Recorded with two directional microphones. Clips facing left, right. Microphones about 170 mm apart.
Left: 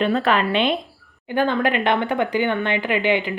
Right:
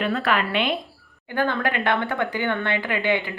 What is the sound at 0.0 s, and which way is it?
A woman's voice, 25° left (ahead or behind).